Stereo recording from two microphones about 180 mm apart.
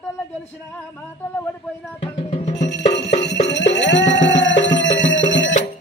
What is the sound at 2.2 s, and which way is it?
Music, 35° left (ahead or behind).